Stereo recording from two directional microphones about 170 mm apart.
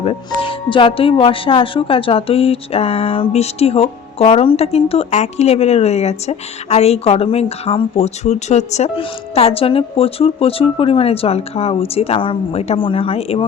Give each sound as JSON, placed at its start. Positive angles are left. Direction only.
{"t": 0.0, "sound": "speech", "side_deg": 30}